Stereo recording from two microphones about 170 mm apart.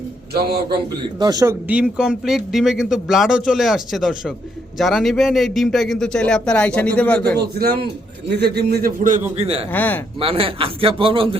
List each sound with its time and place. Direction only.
0.3 s a man's voice: 70° right (ahead or behind)
1.2 s speech: 20° right (ahead or behind)
1.6 s speech: 5° right (ahead or behind); by 7.3 s 10° left (ahead or behind)
7.6 s a man's voice: 65° right (ahead or behind)
9.0 s a man's voice: 50° right (ahead or behind)
9.3 s a man's voice: 35° right (ahead or behind)
9.7 s speech: 10° left (ahead or behind)
10.2 s a man's voice: 35° right (ahead or behind)